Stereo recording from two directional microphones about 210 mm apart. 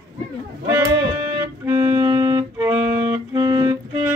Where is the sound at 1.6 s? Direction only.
10° right (ahead or behind).